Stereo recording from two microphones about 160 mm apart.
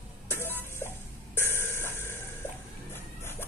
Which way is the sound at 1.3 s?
15° left (ahead or behind).